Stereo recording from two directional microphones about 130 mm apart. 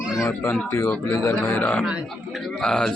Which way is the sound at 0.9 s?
10° left (ahead or behind).